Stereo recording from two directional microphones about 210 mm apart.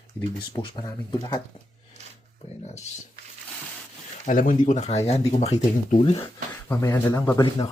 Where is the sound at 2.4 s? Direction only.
30° left (ahead or behind).